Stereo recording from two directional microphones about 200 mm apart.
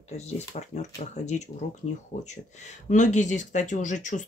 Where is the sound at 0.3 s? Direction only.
35° left (ahead or behind).